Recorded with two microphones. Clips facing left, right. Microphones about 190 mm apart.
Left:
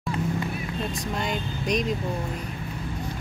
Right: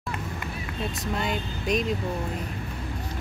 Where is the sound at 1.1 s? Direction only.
Centre (ahead or behind).